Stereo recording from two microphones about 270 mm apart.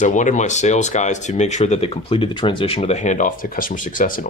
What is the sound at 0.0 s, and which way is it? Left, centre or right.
Speech, left.